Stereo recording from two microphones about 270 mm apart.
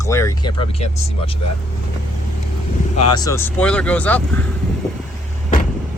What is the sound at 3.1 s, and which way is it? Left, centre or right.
Speech, centre.